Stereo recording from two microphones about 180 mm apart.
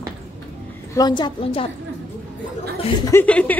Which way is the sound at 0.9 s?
25° left (ahead or behind).